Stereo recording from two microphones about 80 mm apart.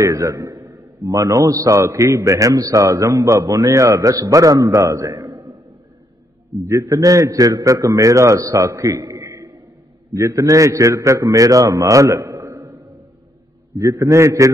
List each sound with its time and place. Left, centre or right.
0.1 s a man's voice: right
6.6 s a man's voice: right
13.7 s a man's voice: right